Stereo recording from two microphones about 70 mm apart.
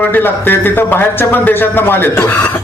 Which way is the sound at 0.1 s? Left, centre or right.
Left.